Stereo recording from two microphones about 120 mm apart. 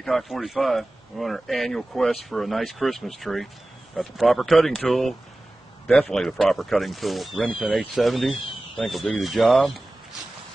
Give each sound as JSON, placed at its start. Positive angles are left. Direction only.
{"t": 0.0, "sound": "speech", "side_deg": 0}